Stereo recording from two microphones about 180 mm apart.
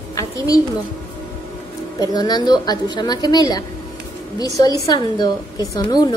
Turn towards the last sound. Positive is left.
turn(degrees=20)  # may be behind; listen again after turning